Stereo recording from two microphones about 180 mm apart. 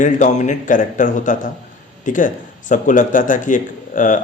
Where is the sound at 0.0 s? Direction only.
45° left (ahead or behind).